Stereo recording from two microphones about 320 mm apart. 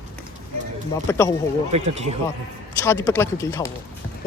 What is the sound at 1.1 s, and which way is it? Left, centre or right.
Speech, centre.